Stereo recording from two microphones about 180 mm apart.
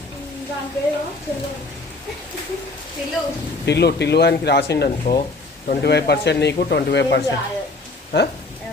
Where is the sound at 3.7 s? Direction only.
70° left (ahead or behind).